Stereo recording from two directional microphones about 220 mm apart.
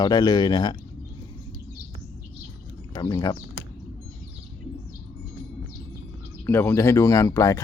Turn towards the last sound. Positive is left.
turn(degrees=15)  # may be behind; listen again after turning